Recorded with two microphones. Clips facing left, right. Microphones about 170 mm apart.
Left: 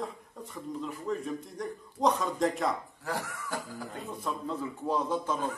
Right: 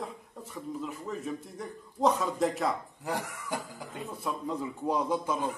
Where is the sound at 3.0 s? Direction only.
20° right (ahead or behind).